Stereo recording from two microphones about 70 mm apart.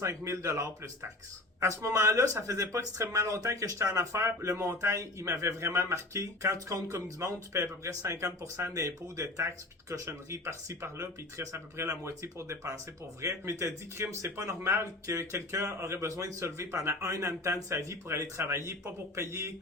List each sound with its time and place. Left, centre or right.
0.0 s speech: right